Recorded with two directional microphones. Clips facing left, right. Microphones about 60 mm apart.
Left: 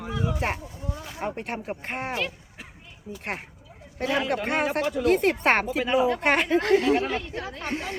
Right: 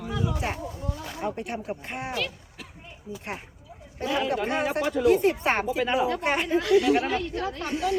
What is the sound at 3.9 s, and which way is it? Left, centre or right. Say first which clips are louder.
Speech: even; left.